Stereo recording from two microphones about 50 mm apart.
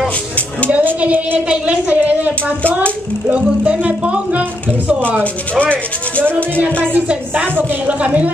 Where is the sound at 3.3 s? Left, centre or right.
Right.